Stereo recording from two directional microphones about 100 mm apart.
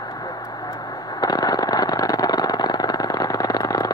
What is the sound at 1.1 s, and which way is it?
Vehicle, 40° left (ahead or behind).